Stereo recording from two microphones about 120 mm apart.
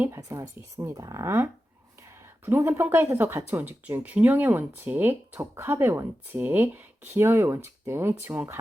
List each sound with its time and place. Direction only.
0.0 s speech: 25° right (ahead or behind)
2.0 s a sound: 20° right (ahead or behind)
2.8 s speech: 20° right (ahead or behind)